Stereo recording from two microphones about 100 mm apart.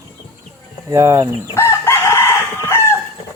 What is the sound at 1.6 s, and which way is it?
Chicken, 25° left (ahead or behind).